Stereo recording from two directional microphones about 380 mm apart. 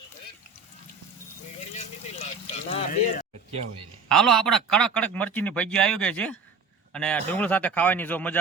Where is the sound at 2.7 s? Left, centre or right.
Centre.